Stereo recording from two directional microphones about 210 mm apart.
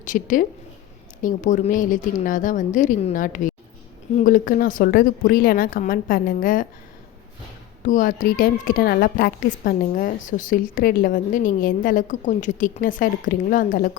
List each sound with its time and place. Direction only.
0.0 s a woman's voice: 40° left (ahead or behind)
7.8 s a woman's voice: 40° left (ahead or behind)